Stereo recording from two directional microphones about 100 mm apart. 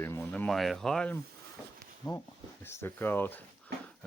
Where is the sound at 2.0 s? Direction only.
30° left (ahead or behind).